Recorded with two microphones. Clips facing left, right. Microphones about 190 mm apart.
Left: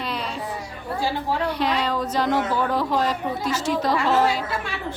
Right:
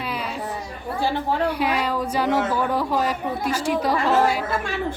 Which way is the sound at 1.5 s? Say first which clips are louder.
Right 1 dB; 10° right (ahead or behind).